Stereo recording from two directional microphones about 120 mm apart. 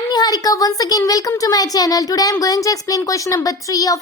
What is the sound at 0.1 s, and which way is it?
Speech, 35° left (ahead or behind).